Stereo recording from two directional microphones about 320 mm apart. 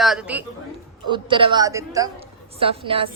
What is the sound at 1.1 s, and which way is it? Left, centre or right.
A woman's voice, centre.